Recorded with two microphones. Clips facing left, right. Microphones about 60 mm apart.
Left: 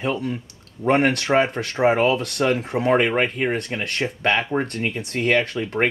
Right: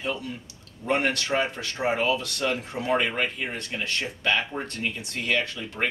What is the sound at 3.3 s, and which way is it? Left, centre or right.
Speech, left.